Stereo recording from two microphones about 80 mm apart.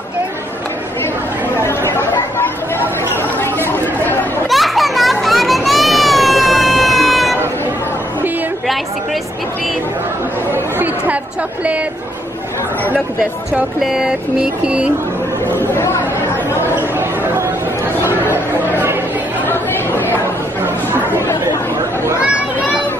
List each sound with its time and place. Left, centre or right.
1.6 s chatter: left
4.5 s children playing: centre
13.7 s vehicle: centre
15.4 s speech: left
18.3 s chatter: right
19.4 s chatter: left